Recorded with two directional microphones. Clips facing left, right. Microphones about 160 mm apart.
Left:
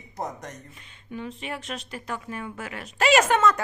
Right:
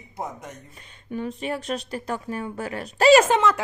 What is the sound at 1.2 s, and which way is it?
A woman's voice, 40° right (ahead or behind).